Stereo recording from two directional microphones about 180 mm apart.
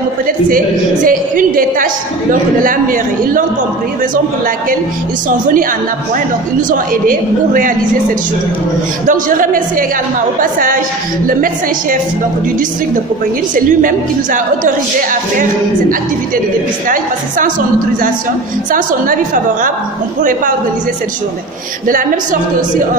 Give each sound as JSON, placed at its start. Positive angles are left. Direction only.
{"t": 1.0, "sound": "a woman's voice", "side_deg": -50}
{"t": 6.7, "sound": "a woman's voice", "side_deg": -50}
{"t": 9.0, "sound": "a woman's voice", "side_deg": -50}
{"t": 13.6, "sound": "a woman's voice", "side_deg": -45}
{"t": 18.7, "sound": "a woman's voice", "side_deg": -50}
{"t": 21.8, "sound": "a woman's voice", "side_deg": -50}